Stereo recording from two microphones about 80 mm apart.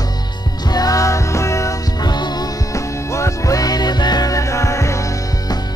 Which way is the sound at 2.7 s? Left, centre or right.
Left.